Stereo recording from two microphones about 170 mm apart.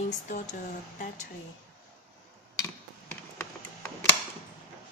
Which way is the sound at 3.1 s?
15° left (ahead or behind).